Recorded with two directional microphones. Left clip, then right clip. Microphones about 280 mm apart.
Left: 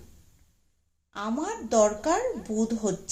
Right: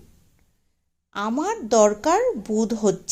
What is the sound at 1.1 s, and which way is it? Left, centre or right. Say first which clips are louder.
A woman's voice: right 7 dB; right.